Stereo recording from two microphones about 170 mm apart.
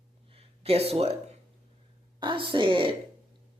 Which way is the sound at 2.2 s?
30° right (ahead or behind).